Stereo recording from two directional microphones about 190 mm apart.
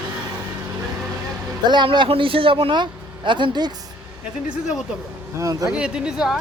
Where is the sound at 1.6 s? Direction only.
25° right (ahead or behind).